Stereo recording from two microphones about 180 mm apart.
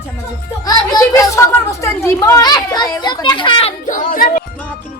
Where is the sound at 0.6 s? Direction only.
20° left (ahead or behind).